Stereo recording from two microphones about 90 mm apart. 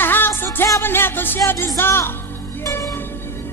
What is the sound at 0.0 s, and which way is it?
Music, 25° left (ahead or behind).